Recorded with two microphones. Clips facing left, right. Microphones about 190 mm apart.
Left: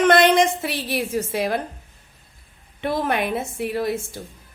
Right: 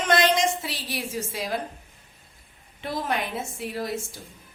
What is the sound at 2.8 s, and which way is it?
A woman's voice, 60° left (ahead or behind).